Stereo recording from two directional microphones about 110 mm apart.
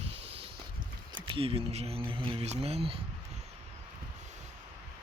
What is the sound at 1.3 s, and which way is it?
Speech, 55° right (ahead or behind).